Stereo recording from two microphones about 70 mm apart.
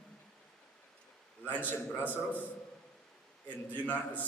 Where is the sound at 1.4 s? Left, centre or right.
Left.